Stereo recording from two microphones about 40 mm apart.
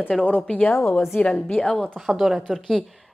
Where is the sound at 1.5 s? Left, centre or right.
Left.